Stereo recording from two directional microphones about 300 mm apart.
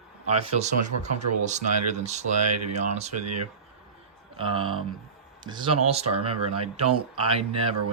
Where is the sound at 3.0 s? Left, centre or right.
Right.